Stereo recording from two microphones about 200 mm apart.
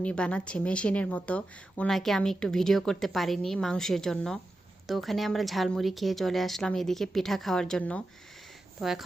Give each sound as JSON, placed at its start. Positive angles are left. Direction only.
{"t": 0.0, "sound": "speech", "side_deg": 5}